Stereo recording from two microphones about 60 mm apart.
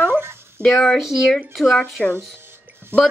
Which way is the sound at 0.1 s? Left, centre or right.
Right.